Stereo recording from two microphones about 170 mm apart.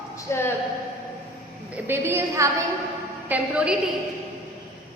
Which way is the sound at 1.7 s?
10° right (ahead or behind).